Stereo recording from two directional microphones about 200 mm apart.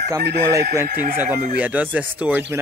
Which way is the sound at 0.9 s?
45° right (ahead or behind).